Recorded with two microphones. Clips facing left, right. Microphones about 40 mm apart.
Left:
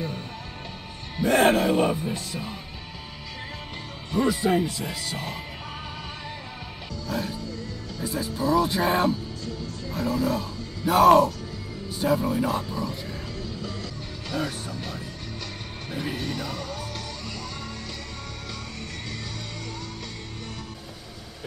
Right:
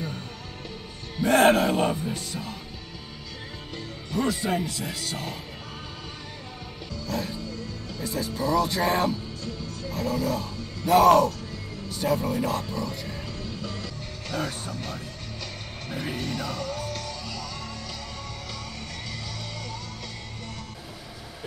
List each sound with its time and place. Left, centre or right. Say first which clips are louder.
1.2 s speech: right 1 dB; centre
4.1 s speech: left 4 dB; centre
7.1 s speech: left 1 dB; centre
12.4 s speech: left 1 dB; centre
13.7 s music: even; centre